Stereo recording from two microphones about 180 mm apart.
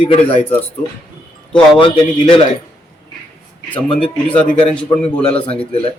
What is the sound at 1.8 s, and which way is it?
Speech, 30° left (ahead or behind).